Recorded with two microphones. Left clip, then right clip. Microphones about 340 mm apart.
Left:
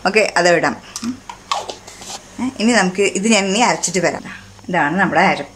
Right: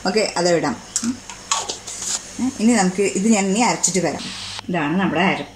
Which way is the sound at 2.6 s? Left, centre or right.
Left.